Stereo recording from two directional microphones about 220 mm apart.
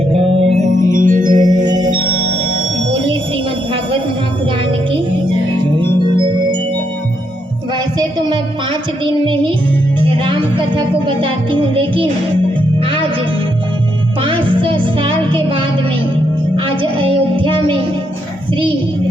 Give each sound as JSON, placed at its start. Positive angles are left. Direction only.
{"t": 0.1, "sound": "music", "side_deg": -25}
{"t": 6.1, "sound": "music", "side_deg": -20}
{"t": 11.0, "sound": "music", "side_deg": -20}
{"t": 14.2, "sound": "music", "side_deg": -25}
{"t": 16.6, "sound": "music", "side_deg": -25}